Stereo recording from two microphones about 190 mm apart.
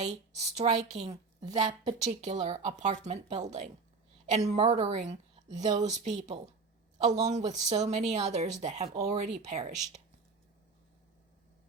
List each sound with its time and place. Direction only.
0.0 s speech: 35° right (ahead or behind)
1.6 s a woman's voice: 20° right (ahead or behind)
2.0 s a woman's voice: 40° right (ahead or behind)